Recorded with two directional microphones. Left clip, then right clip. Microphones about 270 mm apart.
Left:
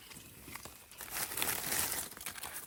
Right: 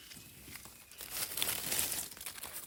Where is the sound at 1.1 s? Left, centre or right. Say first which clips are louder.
Even; centre.